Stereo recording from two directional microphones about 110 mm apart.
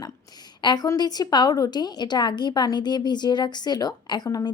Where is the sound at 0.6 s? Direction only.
40° left (ahead or behind).